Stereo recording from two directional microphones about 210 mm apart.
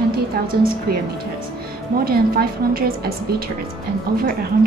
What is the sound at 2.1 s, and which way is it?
A woman's voice, 45° right (ahead or behind).